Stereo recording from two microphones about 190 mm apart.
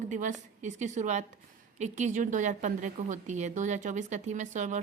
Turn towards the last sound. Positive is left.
turn(degrees=-40)  # may be behind; listen again after turning